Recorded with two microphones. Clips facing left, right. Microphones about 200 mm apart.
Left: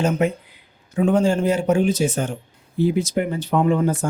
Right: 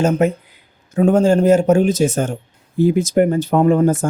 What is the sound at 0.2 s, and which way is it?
Speech, 40° right (ahead or behind).